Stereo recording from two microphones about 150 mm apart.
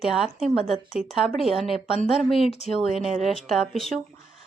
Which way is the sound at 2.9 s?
Centre (ahead or behind).